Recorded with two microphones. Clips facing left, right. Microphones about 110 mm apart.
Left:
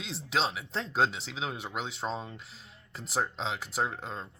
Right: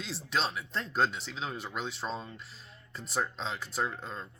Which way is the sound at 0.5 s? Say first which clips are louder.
Left 1 dB; 85° left.